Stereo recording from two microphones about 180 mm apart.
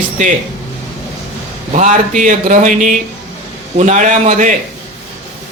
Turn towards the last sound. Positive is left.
turn(degrees=-45)  # may be behind; listen again after turning